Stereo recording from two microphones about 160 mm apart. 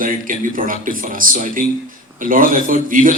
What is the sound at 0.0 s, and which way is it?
A man's voice, 60° right (ahead or behind).